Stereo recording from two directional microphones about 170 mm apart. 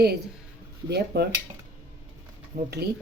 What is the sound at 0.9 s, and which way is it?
Speech, 70° right (ahead or behind).